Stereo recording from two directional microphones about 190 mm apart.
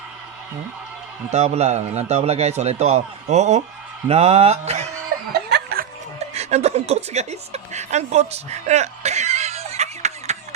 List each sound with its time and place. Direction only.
1.3 s a man's voice: 35° right (ahead or behind)
5.3 s chuckle: 55° right (ahead or behind)
6.1 s a woman's voice: 35° right (ahead or behind)